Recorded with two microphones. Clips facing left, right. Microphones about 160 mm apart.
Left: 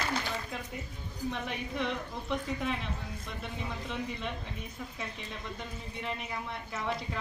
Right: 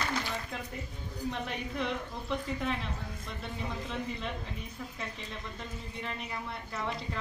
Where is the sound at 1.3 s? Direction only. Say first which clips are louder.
Left 1 dB; centre (ahead or behind).